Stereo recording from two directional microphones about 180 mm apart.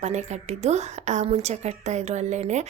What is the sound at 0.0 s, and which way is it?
Speech, 40° right (ahead or behind).